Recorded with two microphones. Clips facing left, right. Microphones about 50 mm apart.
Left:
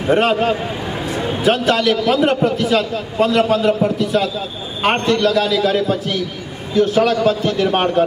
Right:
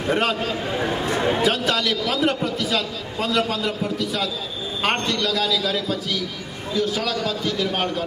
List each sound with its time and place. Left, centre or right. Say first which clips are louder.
0.2 s a man's voice: left 7 dB; left